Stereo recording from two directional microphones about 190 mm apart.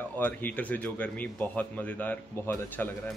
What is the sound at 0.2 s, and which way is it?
A man's voice, 10° left (ahead or behind).